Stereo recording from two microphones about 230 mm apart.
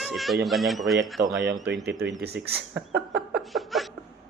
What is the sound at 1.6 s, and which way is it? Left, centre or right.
Speech, right.